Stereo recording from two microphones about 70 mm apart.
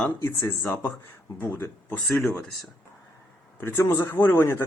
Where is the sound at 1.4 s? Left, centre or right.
Left.